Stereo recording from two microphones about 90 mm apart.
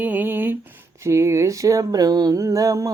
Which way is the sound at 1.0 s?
35° right (ahead or behind).